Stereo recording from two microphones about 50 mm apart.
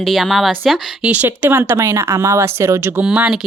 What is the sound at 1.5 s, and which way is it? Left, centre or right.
Speech, right.